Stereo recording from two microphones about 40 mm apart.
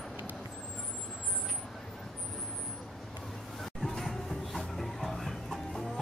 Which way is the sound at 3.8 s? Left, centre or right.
Centre.